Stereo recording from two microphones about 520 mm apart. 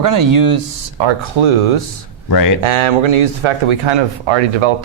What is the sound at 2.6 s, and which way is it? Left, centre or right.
Speech, right.